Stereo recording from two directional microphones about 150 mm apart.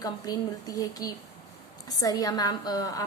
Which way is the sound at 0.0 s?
25° left (ahead or behind).